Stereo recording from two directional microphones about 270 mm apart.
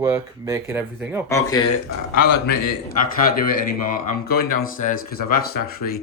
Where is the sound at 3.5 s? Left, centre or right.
Left.